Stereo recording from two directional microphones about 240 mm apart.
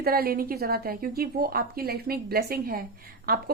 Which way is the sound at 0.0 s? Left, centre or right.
Right.